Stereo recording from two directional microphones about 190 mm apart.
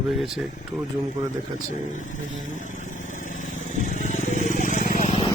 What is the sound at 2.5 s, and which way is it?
Vehicle, 40° left (ahead or behind).